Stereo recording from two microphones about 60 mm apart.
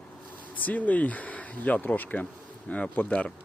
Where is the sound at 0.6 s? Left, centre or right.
Left.